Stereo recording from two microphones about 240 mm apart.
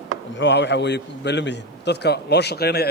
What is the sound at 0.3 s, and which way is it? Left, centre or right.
A man's voice, left.